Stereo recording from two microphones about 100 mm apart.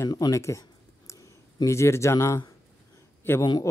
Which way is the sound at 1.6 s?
30° left (ahead or behind).